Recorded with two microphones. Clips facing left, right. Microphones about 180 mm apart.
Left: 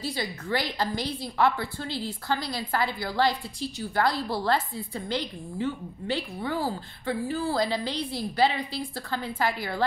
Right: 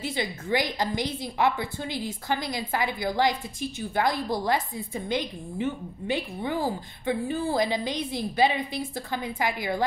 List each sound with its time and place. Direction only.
0.0 s a woman's voice: 20° right (ahead or behind)